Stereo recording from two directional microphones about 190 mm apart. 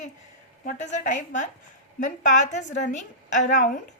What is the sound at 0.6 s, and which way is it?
A woman's voice, 40° left (ahead or behind).